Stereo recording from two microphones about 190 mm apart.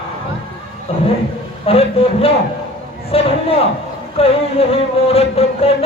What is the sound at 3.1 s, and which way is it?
Speech, 30° left (ahead or behind).